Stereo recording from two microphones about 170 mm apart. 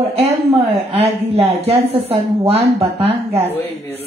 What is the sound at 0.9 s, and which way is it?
A woman's voice, 35° right (ahead or behind).